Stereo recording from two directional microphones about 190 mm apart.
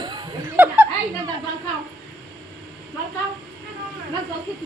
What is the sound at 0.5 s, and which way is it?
Chuckle, 10° right (ahead or behind).